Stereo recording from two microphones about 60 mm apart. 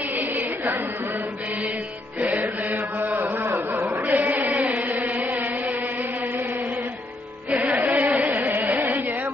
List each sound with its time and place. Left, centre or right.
2.1 s chant: right
7.5 s music: right
8.1 s music: right